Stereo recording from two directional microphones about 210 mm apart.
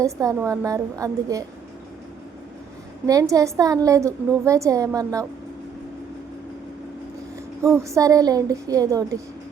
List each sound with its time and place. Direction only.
0.0 s a woman's voice: 15° right (ahead or behind)
3.1 s a woman's voice: 15° right (ahead or behind)
7.6 s a woman's voice: 15° right (ahead or behind)